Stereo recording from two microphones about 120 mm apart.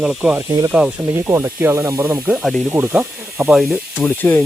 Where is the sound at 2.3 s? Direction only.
5° right (ahead or behind).